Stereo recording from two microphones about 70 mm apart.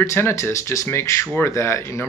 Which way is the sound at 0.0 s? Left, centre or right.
Left.